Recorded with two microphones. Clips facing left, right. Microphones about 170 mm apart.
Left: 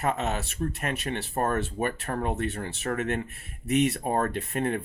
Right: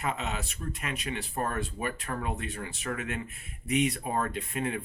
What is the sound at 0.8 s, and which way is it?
Speech, 55° left (ahead or behind).